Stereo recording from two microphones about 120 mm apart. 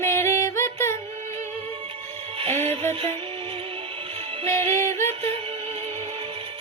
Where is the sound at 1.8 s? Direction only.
50° right (ahead or behind).